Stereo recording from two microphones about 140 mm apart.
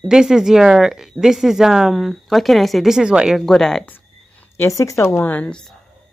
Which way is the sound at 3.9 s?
15° left (ahead or behind).